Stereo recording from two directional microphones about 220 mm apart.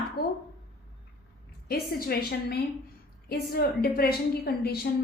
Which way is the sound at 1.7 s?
45° left (ahead or behind).